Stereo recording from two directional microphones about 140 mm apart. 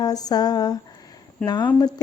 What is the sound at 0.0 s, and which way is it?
Speech, 25° left (ahead or behind).